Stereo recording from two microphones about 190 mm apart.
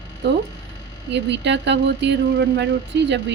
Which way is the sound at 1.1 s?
65° right (ahead or behind).